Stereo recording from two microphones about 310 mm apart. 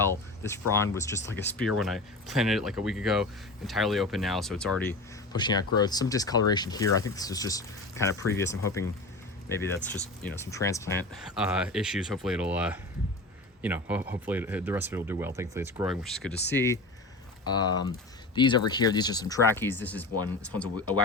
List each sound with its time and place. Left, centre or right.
0.0 s speech: centre
11.3 s speech: centre